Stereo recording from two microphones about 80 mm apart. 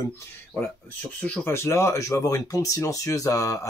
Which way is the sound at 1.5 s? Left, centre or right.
Left.